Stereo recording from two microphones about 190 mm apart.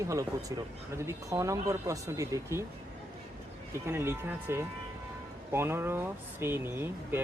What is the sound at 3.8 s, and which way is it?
Speech, 15° right (ahead or behind).